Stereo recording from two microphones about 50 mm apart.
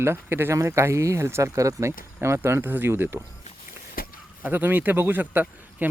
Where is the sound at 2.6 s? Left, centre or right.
Right.